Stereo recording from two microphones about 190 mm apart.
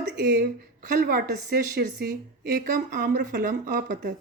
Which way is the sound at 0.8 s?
55° right (ahead or behind).